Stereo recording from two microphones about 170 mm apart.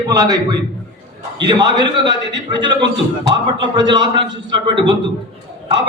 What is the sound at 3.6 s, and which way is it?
A man's voice, 25° right (ahead or behind).